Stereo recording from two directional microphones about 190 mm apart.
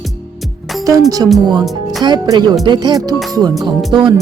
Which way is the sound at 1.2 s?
15° right (ahead or behind).